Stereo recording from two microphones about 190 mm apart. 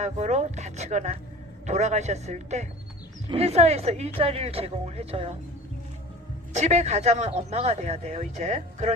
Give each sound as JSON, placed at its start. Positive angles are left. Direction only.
{"t": 0.0, "sound": "speech", "side_deg": -35}
{"t": 6.5, "sound": "speech", "side_deg": -35}